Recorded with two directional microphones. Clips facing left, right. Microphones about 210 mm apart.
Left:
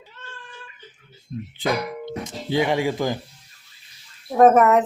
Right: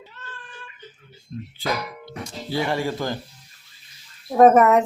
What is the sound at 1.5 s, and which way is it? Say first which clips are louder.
Speech: left 4 dB; 20° left (ahead or behind).